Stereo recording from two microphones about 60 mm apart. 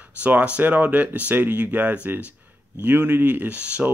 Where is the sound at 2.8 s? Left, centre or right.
Right.